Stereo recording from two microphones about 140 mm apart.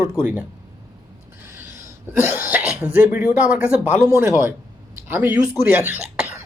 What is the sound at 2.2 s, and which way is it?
Speech, 15° right (ahead or behind).